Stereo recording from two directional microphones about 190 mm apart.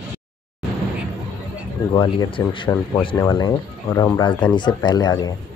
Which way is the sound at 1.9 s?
25° left (ahead or behind).